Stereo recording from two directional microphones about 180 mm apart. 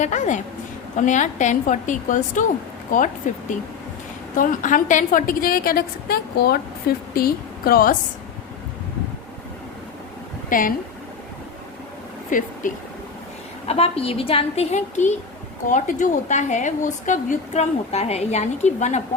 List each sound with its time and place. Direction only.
0.0 s a woman's voice: 40° left (ahead or behind)
10.5 s a woman's voice: 50° left (ahead or behind)
12.3 s a woman's voice: 45° left (ahead or behind)
13.7 s a woman's voice: 35° left (ahead or behind)